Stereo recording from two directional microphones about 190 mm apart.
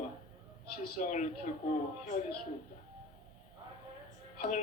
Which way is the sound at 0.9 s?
40° left (ahead or behind).